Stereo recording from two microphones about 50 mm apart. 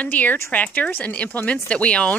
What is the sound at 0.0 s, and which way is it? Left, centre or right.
Speech, left.